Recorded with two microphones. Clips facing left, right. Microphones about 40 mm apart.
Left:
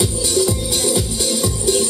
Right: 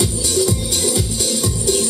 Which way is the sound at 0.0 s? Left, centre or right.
Centre.